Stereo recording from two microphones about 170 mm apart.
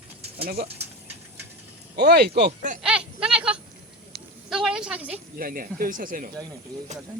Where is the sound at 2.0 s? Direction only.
70° right (ahead or behind).